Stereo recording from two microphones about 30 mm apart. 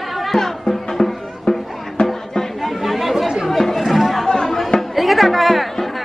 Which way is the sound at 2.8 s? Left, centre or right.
Centre.